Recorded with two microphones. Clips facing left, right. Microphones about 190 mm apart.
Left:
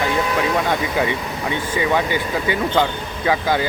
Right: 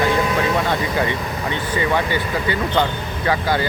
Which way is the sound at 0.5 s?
10° left (ahead or behind).